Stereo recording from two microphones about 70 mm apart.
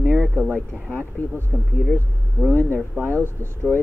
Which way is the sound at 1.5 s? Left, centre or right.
Centre.